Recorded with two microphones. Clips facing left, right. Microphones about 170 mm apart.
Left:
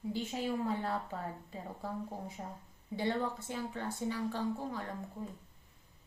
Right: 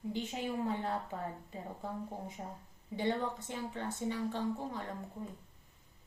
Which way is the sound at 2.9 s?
20° right (ahead or behind).